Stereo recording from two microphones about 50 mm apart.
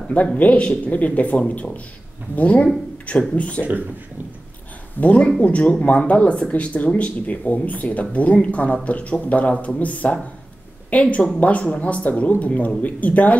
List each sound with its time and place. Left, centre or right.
0.4 s speech: left
5.0 s speech: left